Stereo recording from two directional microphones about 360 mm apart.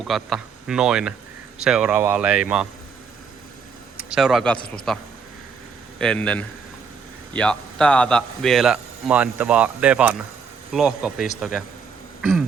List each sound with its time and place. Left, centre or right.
0.0 s speech: centre
4.1 s speech: centre